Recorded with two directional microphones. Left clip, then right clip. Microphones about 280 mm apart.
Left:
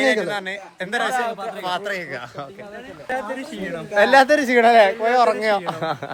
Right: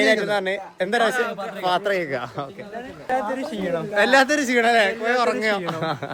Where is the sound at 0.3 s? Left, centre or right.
Centre.